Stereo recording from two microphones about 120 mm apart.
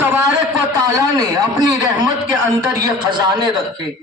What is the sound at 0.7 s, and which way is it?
Speech, 30° right (ahead or behind).